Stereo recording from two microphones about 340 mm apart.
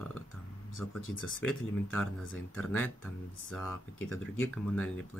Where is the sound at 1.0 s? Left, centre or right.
Left.